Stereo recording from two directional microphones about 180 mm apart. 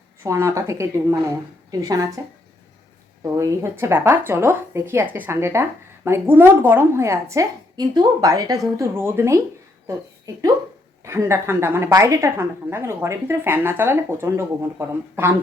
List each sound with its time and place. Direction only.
0.2 s a woman's voice: 15° right (ahead or behind)
3.3 s a woman's voice: 15° right (ahead or behind)